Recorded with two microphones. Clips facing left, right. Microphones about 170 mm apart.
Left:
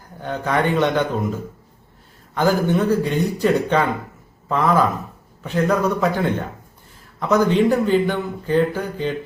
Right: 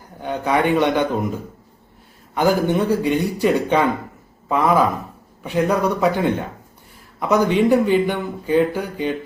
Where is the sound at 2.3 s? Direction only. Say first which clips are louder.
Right 1 dB; 15° right (ahead or behind).